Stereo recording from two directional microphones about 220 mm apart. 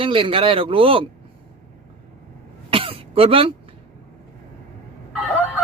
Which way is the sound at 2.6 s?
25° right (ahead or behind).